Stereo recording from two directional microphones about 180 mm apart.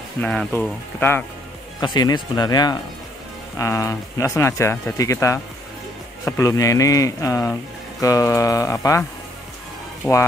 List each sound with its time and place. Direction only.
0.2 s speech: 5° left (ahead or behind)
1.8 s speech: 25° left (ahead or behind)
10.0 s speech: 15° left (ahead or behind)